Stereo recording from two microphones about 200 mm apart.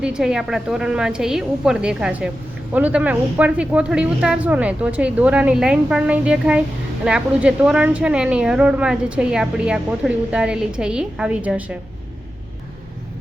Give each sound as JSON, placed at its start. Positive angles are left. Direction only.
{"t": 0.0, "sound": "a woman's voice", "side_deg": -5}